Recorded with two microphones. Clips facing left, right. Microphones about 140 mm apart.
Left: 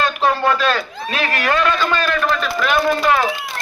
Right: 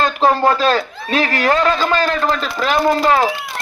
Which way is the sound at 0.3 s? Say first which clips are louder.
Right 4 dB; 35° right (ahead or behind).